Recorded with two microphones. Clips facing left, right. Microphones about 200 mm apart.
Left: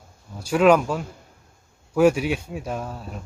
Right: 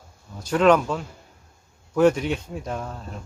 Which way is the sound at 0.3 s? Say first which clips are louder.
Left 1 dB; 10° left (ahead or behind).